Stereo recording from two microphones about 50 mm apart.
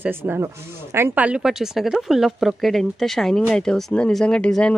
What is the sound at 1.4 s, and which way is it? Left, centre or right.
Speech, centre.